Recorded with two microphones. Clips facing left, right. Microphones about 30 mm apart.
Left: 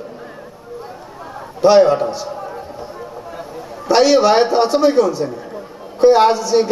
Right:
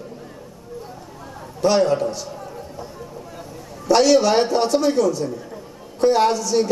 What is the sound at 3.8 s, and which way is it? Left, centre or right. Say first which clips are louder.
A man's voice: left 3 dB; left.